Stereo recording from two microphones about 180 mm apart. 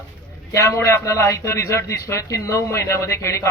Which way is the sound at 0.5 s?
15° left (ahead or behind).